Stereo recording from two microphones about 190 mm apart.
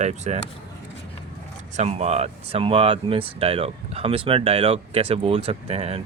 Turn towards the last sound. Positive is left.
turn(degrees=-35)  # may be behind; listen again after turning